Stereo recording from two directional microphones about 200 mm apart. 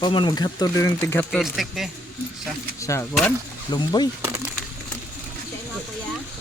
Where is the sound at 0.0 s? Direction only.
25° left (ahead or behind).